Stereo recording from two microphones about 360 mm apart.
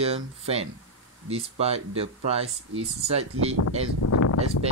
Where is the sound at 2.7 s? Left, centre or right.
Right.